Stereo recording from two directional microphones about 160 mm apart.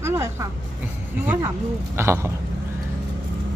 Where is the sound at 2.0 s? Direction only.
15° right (ahead or behind).